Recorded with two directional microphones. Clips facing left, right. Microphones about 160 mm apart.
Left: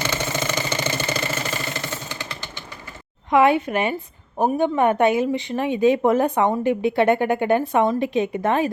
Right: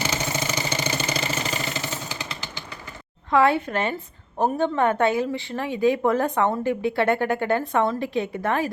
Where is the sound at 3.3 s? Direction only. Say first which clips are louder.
Left 3 dB; 15° left (ahead or behind).